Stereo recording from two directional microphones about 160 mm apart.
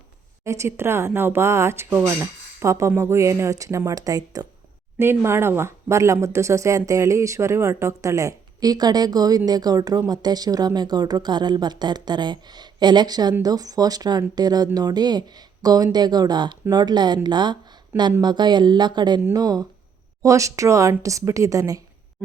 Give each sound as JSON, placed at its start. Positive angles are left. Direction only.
{"t": 0.4, "sound": "speech", "side_deg": -20}